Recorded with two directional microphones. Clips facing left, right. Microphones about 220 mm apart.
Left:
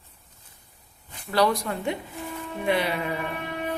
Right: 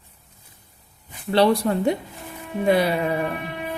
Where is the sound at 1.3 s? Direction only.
30° right (ahead or behind).